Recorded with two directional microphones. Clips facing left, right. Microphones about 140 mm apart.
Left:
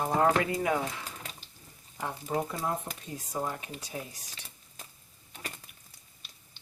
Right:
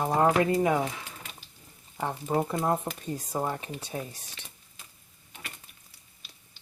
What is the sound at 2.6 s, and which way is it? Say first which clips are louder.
Speech: right 5 dB; 45° right (ahead or behind).